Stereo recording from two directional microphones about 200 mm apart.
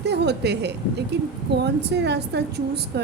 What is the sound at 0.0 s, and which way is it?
A woman's voice, 55° right (ahead or behind).